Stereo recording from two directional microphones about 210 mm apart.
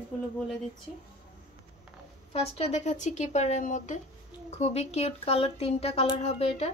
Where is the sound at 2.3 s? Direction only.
30° left (ahead or behind).